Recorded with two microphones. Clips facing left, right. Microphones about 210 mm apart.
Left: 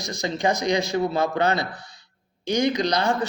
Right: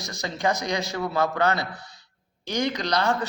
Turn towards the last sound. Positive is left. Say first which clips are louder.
# left 3 dB
turn(degrees=15)  # may be behind; listen again after turning